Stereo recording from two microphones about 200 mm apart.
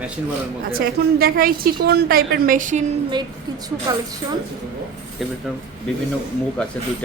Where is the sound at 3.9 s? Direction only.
20° right (ahead or behind).